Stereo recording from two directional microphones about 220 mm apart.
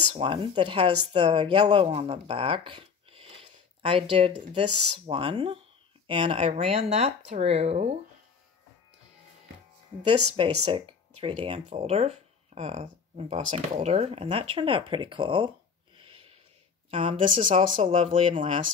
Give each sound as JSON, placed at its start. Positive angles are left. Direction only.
{"t": 0.1, "sound": "speech", "side_deg": -25}
{"t": 10.3, "sound": "speech", "side_deg": -25}
{"t": 16.0, "sound": "a sound", "side_deg": -25}
{"t": 16.9, "sound": "speech", "side_deg": -25}